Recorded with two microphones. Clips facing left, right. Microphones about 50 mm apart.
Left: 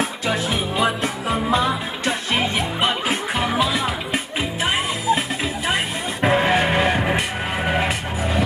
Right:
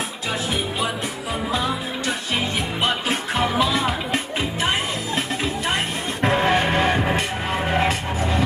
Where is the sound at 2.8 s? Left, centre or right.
Centre.